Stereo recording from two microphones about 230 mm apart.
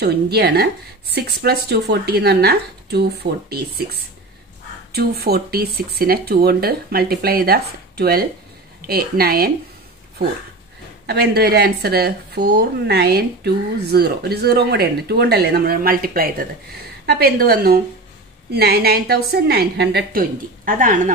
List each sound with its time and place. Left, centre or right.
0.0 s speech: right
4.9 s speech: right
11.1 s speech: right